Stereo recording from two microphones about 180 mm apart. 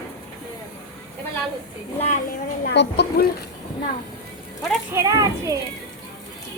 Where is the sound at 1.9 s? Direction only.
40° left (ahead or behind).